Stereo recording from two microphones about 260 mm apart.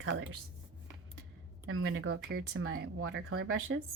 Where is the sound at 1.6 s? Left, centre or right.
Right.